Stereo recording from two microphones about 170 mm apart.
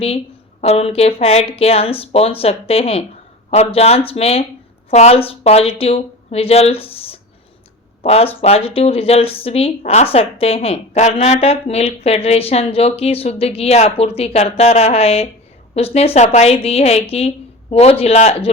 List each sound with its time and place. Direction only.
0.6 s speech: 35° left (ahead or behind)